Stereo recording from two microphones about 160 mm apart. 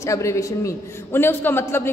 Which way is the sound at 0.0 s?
20° left (ahead or behind).